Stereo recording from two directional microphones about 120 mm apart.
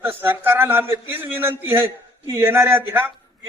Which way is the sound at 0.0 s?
15° right (ahead or behind).